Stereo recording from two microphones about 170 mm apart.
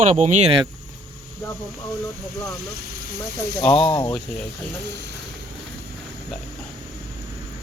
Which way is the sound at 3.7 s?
30° left (ahead or behind).